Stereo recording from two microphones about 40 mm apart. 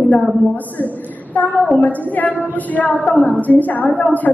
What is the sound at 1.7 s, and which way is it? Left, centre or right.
A woman's voice, left.